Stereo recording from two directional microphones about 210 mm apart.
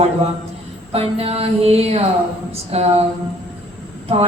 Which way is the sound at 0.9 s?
30° right (ahead or behind).